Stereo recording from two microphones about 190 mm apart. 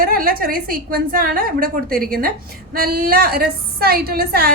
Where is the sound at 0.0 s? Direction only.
50° right (ahead or behind).